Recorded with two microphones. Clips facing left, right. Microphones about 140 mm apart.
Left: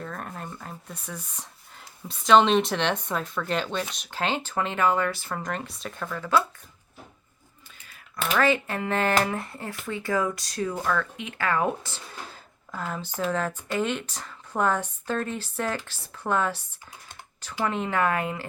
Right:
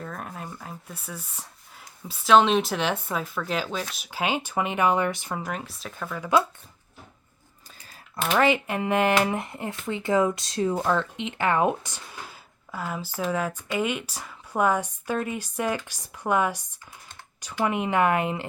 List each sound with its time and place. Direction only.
0.0 s speech: centre (ahead or behind); by 5.4 s 20° right (ahead or behind)
5.4 s speech: 5° right (ahead or behind)
7.9 s speech: 30° right (ahead or behind)